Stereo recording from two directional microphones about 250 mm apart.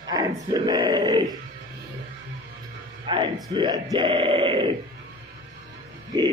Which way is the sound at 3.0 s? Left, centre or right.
Centre.